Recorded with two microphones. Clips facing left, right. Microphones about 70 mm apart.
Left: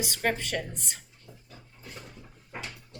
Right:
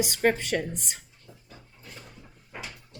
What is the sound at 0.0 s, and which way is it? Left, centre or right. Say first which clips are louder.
Speech: right 5 dB; centre.